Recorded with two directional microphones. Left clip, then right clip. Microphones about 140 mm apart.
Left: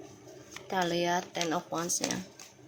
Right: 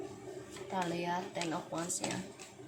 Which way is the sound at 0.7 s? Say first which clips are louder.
Left 7 dB; 65° left (ahead or behind).